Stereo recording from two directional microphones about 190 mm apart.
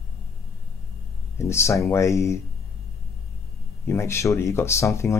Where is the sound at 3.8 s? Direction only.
15° left (ahead or behind).